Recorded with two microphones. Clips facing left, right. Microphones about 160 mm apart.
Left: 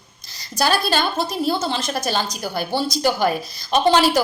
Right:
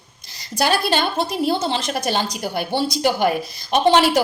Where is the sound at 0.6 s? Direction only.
25° right (ahead or behind).